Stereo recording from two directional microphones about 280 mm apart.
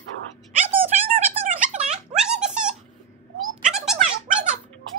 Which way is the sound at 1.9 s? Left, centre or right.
Centre.